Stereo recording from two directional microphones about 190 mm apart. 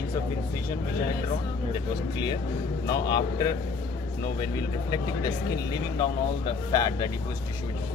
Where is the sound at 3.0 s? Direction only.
20° left (ahead or behind).